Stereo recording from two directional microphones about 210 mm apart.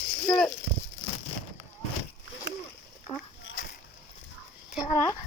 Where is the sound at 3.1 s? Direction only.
15° left (ahead or behind).